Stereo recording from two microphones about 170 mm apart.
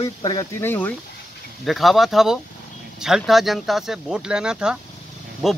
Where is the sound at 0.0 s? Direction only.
25° left (ahead or behind).